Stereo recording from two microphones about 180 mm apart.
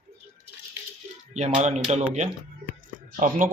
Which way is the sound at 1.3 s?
40° right (ahead or behind).